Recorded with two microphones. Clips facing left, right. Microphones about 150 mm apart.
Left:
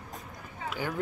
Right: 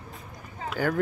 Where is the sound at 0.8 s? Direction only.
45° right (ahead or behind).